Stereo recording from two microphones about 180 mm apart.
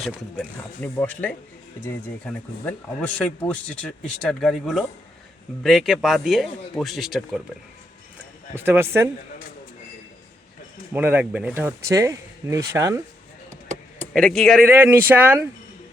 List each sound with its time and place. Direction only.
0.0 s speech: 5° left (ahead or behind)
8.5 s speech: 10° right (ahead or behind)
10.9 s speech: 10° right (ahead or behind)
13.5 s a sound: 40° right (ahead or behind)
14.1 s speech: 5° left (ahead or behind)
14.7 s speech: 10° right (ahead or behind)